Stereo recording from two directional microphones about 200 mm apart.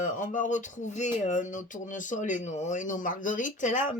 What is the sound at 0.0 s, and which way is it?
Speech, 40° left (ahead or behind).